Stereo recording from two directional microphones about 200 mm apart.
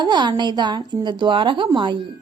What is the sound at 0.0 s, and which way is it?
A woman's voice, 20° right (ahead or behind).